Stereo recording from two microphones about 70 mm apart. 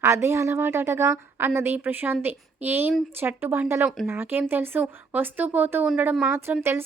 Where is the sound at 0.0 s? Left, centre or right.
Right.